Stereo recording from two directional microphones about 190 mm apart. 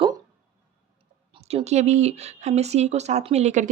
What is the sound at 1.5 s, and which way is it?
Speech, 35° right (ahead or behind).